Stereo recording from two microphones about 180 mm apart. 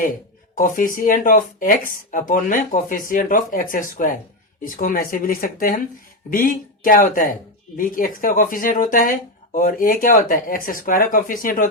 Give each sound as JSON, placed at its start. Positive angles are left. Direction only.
{"t": 0.0, "sound": "speech", "side_deg": 50}